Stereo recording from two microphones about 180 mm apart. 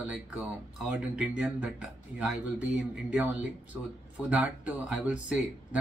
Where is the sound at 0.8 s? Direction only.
5° right (ahead or behind).